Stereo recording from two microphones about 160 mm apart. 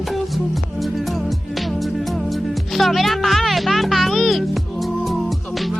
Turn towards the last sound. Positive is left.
turn(degrees=0)  # may be behind; listen again after turning